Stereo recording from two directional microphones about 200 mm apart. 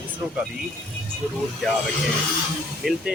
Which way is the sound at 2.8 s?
Centre (ahead or behind).